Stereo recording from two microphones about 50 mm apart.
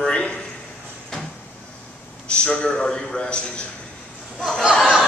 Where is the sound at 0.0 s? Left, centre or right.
Centre.